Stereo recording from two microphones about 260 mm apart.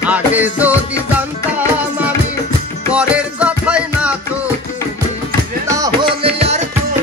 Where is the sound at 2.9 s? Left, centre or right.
Centre.